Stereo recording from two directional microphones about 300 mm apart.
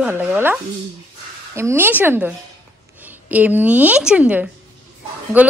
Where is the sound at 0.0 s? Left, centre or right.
Centre.